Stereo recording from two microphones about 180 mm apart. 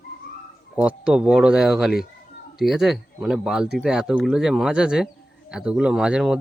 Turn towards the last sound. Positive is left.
turn(degrees=-5)  # may be behind; listen again after turning